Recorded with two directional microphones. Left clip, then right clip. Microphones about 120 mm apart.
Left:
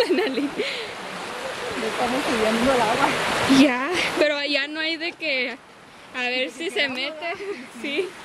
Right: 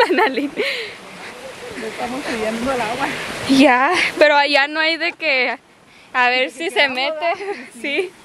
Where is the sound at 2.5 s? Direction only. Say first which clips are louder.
Left 1 dB; 15° right (ahead or behind).